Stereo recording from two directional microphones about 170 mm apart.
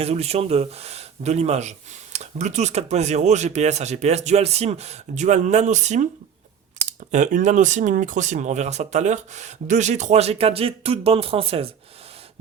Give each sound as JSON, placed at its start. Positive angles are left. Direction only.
{"t": 0.0, "sound": "speech", "side_deg": -40}
{"t": 7.1, "sound": "speech", "side_deg": -45}